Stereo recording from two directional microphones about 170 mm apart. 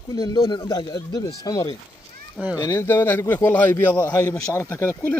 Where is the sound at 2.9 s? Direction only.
10° left (ahead or behind).